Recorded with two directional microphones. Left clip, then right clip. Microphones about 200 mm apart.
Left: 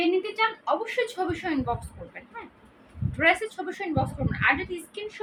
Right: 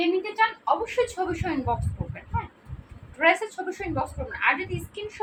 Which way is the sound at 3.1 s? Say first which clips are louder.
Right 1 dB; 15° left (ahead or behind).